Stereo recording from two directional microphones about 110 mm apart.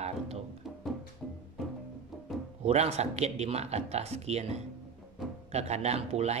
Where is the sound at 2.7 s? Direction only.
80° right.